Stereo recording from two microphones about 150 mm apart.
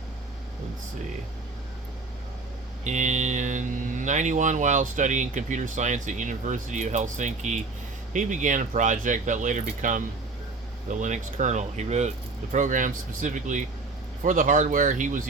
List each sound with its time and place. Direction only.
2.8 s speech: 55° right (ahead or behind)